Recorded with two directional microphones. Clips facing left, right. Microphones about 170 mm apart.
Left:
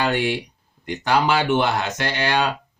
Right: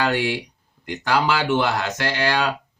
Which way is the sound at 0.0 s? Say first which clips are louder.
Even; 20° left (ahead or behind).